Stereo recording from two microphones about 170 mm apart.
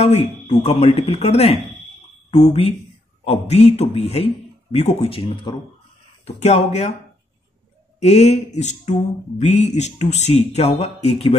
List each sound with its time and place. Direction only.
0.0 s speech: 40° left (ahead or behind)
8.0 s speech: 40° left (ahead or behind)